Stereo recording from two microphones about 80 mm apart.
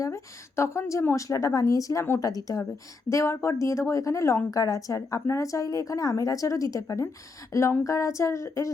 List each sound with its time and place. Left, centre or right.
0.0 s a woman's voice: left